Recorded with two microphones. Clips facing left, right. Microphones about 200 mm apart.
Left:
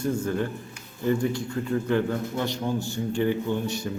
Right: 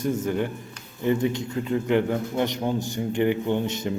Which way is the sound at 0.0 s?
20° right (ahead or behind).